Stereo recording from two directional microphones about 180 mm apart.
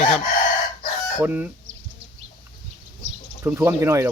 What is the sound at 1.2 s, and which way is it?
Speech, 10° right (ahead or behind).